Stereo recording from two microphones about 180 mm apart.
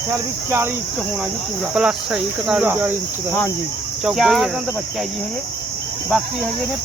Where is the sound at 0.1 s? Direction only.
15° right (ahead or behind).